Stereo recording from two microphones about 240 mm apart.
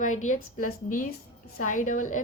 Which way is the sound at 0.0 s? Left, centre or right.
Left.